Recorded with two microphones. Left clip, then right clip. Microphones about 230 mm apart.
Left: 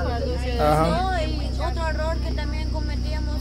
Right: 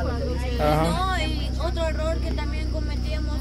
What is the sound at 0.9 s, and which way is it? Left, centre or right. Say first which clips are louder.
Music: left 1 dB; right.